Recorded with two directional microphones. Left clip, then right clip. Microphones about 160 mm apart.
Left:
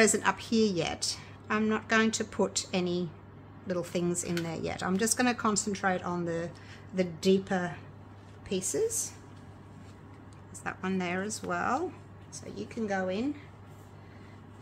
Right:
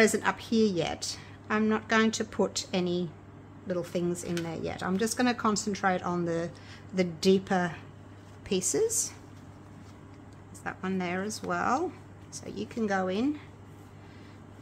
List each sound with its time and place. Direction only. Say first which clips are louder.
0.0 s a woman's voice: right 1 dB; 5° right (ahead or behind); by 9.1 s 35° right (ahead or behind)
10.6 s a woman's voice: even; 5° right (ahead or behind)
12.3 s speech: right 3 dB; 35° right (ahead or behind)